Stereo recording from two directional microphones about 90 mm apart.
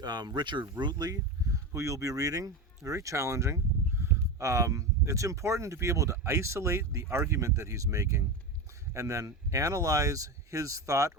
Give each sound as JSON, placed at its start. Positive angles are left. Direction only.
{"t": 0.0, "sound": "speech", "side_deg": -50}